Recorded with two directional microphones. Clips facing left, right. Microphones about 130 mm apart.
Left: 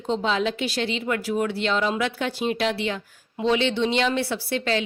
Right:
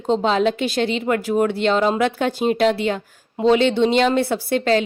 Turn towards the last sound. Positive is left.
turn(degrees=-45)  # may be behind; listen again after turning